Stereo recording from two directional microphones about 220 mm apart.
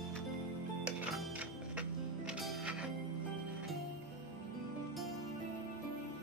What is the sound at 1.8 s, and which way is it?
Music, 5° right (ahead or behind).